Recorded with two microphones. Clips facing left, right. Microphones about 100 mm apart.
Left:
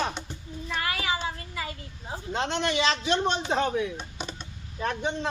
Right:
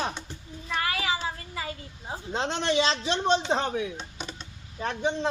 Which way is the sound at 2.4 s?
30° right (ahead or behind).